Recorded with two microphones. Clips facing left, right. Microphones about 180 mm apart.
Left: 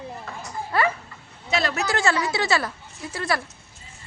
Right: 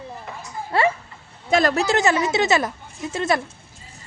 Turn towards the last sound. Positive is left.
turn(degrees=-20)  # may be behind; listen again after turning